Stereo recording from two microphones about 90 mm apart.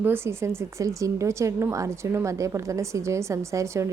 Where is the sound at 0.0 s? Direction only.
25° right (ahead or behind).